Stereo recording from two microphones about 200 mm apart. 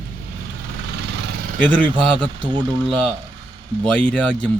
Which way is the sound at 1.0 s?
55° right (ahead or behind).